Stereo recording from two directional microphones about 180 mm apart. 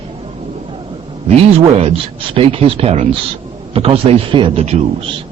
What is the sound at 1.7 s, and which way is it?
A man's voice, 35° right (ahead or behind).